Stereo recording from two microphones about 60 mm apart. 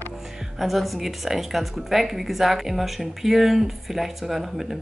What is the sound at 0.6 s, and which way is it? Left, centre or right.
A woman's voice, centre.